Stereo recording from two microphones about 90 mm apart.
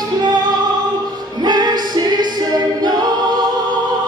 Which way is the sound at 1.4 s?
50° right (ahead or behind).